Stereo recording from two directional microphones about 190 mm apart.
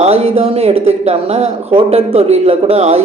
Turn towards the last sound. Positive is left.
turn(degrees=-35)  # may be behind; listen again after turning